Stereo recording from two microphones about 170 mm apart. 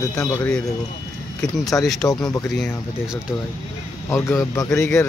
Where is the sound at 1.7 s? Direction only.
10° left (ahead or behind).